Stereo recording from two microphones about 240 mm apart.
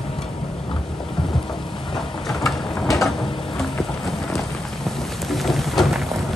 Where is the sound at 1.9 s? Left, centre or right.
Centre.